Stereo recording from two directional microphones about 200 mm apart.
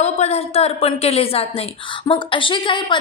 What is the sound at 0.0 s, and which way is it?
A woman's voice, 30° left (ahead or behind).